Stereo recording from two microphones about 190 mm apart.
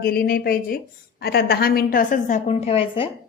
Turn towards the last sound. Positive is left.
turn(degrees=30)  # may be behind; listen again after turning